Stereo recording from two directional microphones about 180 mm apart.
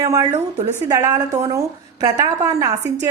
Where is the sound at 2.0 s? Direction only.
20° right (ahead or behind).